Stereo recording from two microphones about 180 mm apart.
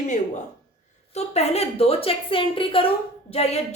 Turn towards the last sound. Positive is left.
turn(degrees=35)  # may be behind; listen again after turning